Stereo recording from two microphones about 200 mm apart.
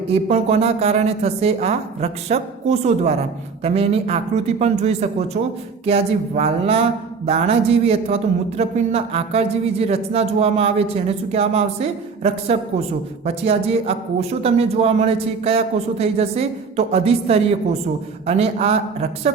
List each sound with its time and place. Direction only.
0.1 s a man's voice: 30° right (ahead or behind)